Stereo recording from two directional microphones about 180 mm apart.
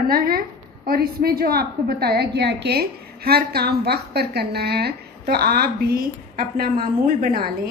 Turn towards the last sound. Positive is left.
turn(degrees=-55)  # may be behind; listen again after turning